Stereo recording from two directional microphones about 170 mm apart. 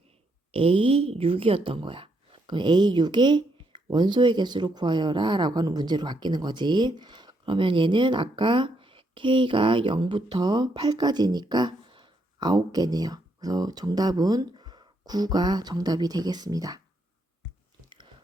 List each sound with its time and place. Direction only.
0.5 s speech: 35° right (ahead or behind)
17.8 s biting: 30° right (ahead or behind)